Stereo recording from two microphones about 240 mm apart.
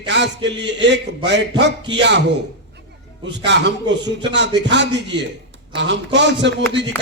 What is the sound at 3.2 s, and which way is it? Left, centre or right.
A man's voice, right.